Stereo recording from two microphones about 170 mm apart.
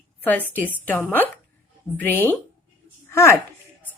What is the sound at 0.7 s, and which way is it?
Speech, 10° left (ahead or behind).